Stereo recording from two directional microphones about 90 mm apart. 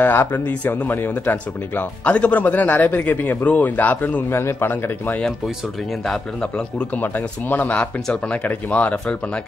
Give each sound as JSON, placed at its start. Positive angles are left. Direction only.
{"t": 0.0, "sound": "speech", "side_deg": 25}
{"t": 4.3, "sound": "speech", "side_deg": 30}
{"t": 6.0, "sound": "speech", "side_deg": 10}